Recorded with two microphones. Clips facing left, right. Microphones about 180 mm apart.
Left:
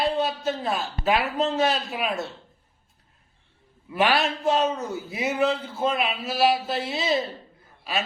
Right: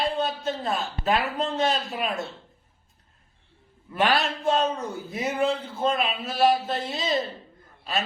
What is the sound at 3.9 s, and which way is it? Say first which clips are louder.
Speech: left 1 dB; 5° left (ahead or behind).